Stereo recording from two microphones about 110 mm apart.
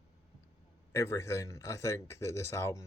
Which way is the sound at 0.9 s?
25° left (ahead or behind).